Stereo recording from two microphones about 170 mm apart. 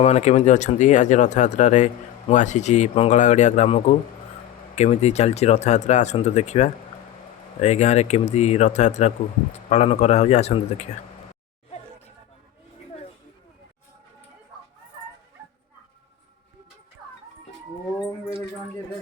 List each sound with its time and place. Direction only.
0.0 s speech: 40° left (ahead or behind)